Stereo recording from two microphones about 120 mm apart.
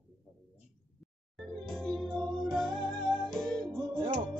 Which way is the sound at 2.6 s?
40° right (ahead or behind).